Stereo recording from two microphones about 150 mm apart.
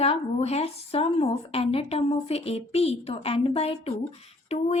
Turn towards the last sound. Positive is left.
turn(degrees=45)  # may be behind; listen again after turning